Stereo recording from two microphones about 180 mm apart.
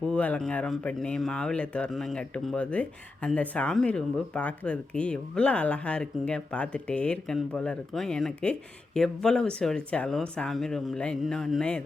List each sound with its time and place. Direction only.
0.0 s speech: 5° left (ahead or behind)